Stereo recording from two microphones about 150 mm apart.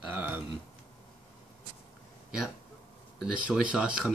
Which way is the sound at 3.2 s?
5° right (ahead or behind).